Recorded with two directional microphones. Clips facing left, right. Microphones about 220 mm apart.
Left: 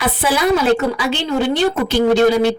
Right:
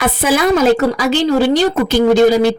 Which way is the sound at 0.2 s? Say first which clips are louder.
Right 3 dB; 45° right (ahead or behind).